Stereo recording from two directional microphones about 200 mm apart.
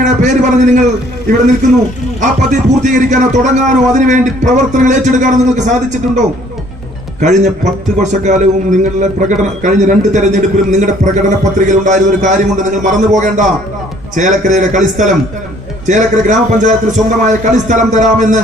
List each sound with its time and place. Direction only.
0.0 s a man's voice: 35° right (ahead or behind)
2.2 s a man's voice: 40° right (ahead or behind)